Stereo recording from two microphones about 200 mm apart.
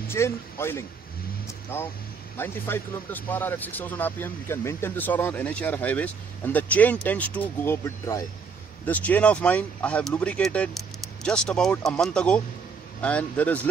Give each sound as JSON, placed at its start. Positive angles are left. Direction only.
{"t": 0.1, "sound": "speech", "side_deg": 10}